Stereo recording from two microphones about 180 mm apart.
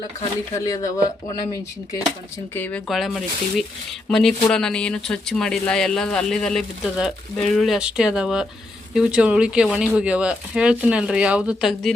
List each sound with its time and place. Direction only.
0.5 s speech: 20° left (ahead or behind)
2.6 s speech: 10° left (ahead or behind)